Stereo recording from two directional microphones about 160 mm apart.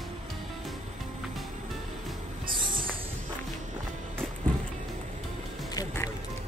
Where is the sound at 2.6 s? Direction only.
60° right (ahead or behind).